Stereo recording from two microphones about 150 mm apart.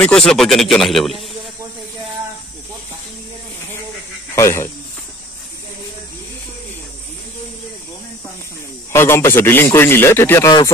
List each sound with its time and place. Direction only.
0.0 s speech: 5° left (ahead or behind)
4.4 s speech: 20° left (ahead or behind)
8.9 s a man's voice: 15° left (ahead or behind)